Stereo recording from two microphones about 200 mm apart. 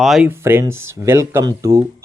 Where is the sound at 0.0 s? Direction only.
5° right (ahead or behind).